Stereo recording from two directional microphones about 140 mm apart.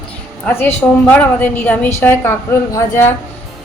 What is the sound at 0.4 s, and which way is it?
A woman's voice, 15° left (ahead or behind).